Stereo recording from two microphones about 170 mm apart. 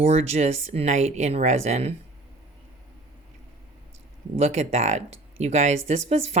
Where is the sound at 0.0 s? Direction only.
40° right (ahead or behind).